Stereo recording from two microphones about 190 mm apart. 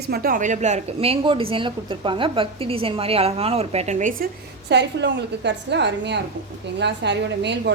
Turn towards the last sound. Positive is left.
turn(degrees=-65)  # may be behind; listen again after turning